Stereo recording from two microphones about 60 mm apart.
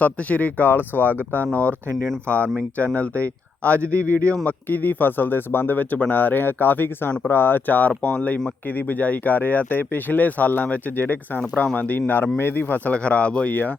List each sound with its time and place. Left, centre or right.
0.0 s speech: left
2.7 s speech: left